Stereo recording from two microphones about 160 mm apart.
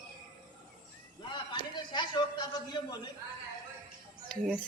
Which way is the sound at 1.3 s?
30° left (ahead or behind).